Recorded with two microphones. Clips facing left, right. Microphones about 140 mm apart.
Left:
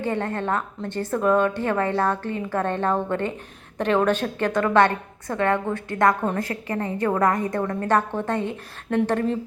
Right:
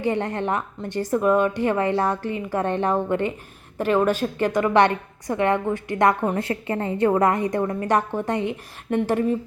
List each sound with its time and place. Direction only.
0.0 s a woman's voice: 15° right (ahead or behind)